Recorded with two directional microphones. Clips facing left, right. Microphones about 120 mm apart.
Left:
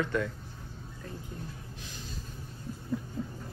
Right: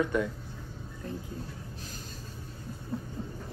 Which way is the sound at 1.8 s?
45° right (ahead or behind).